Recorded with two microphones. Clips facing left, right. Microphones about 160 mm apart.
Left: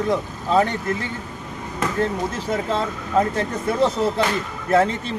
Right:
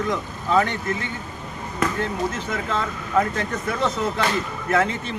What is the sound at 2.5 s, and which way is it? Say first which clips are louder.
Speech: left 3 dB; 30° left (ahead or behind).